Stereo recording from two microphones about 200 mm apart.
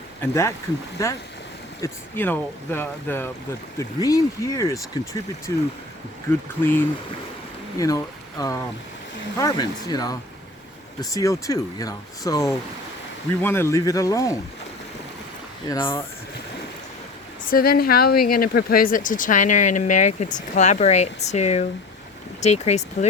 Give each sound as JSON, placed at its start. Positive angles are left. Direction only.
{"t": 0.2, "sound": "speech", "side_deg": 15}
{"t": 6.6, "sound": "speech", "side_deg": 10}
{"t": 15.7, "sound": "speech", "side_deg": 25}
{"t": 17.5, "sound": "speech", "side_deg": 50}